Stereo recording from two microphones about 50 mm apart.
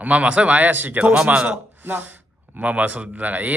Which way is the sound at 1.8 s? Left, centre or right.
Right.